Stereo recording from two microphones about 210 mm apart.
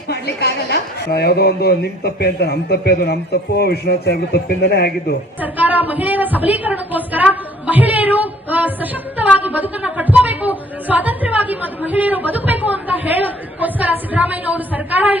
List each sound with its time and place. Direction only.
0.1 s a woman's voice: 50° left (ahead or behind)
5.4 s speech: 10° right (ahead or behind)